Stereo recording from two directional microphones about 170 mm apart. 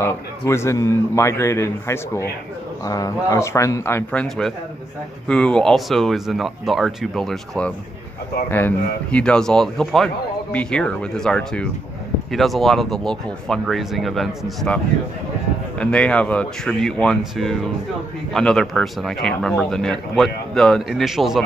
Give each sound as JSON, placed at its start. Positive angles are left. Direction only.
{"t": 0.0, "sound": "a man's voice", "side_deg": 15}
{"t": 15.8, "sound": "speech", "side_deg": 5}